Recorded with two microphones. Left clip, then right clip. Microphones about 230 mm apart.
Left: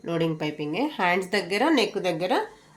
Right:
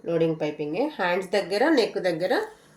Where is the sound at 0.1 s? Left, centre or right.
Left.